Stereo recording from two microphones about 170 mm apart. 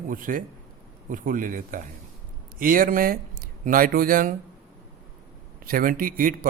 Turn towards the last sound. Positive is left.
turn(degrees=-55)  # may be behind; listen again after turning